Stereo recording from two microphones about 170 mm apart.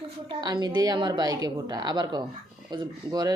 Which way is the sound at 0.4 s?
25° right (ahead or behind).